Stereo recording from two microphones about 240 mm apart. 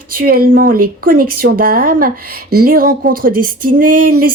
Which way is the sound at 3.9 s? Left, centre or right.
Right.